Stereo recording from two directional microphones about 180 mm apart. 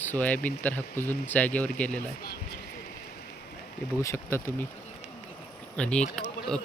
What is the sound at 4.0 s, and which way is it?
Speech, 15° left (ahead or behind).